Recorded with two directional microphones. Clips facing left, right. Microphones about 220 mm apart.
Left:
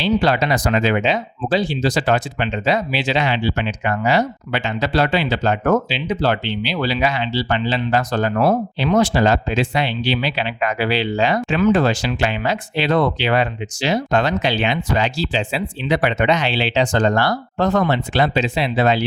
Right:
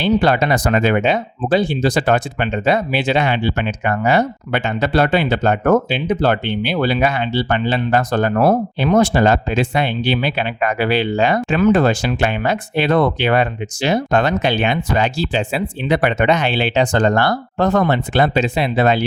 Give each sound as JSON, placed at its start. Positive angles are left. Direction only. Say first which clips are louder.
{"t": 0.0, "sound": "speech", "louder": "right 2 dB", "side_deg": -55}